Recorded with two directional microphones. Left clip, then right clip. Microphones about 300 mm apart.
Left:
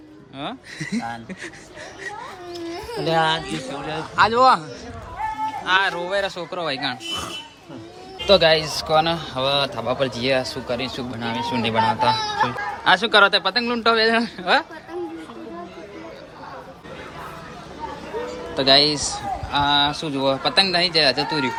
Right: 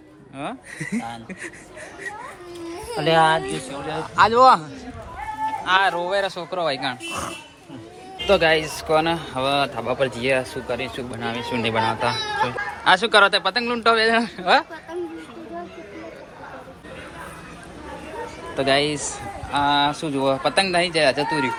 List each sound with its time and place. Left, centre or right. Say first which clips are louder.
0.3 s speech: even; centre
3.0 s speech: right 3 dB; right
3.8 s speech: right 1 dB; centre
5.6 s speech: right 1 dB; centre
8.3 s a man's voice: left 2 dB; centre
18.5 s a man's voice: left 4 dB; centre